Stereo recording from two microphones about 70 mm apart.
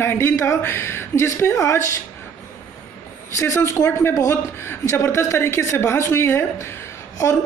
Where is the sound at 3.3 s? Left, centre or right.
Left.